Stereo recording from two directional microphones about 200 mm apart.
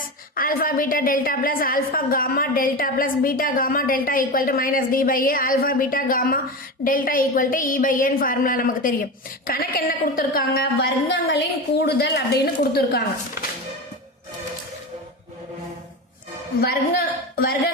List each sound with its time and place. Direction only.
0.3 s a woman's voice: 45° left (ahead or behind)
16.6 s a man's voice: 50° left (ahead or behind)